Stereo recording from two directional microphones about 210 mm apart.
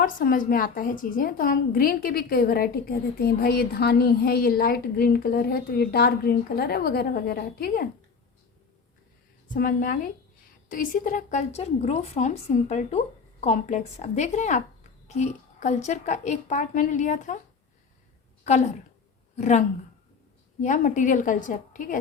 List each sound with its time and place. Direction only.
0.0 s a woman's voice: 40° left (ahead or behind)
9.5 s a woman's voice: 40° left (ahead or behind)
18.4 s a woman's voice: 30° left (ahead or behind)